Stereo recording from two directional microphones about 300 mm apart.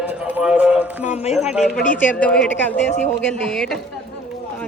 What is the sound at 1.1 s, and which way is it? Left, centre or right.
Speech, left.